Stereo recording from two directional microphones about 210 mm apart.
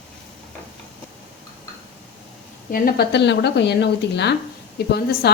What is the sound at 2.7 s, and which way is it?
Speech, 50° left (ahead or behind).